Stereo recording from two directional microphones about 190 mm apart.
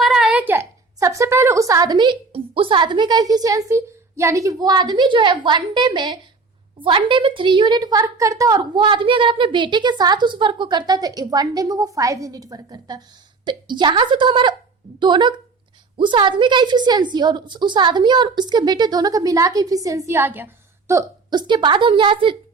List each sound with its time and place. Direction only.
0.0 s a woman's voice: centre (ahead or behind); by 22.4 s 25° right (ahead or behind)